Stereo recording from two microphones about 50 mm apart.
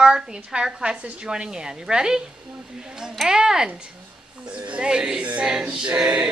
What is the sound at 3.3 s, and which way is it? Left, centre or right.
Speech, centre.